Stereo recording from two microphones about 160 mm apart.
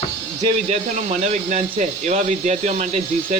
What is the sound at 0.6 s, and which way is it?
Speech, 45° right (ahead or behind).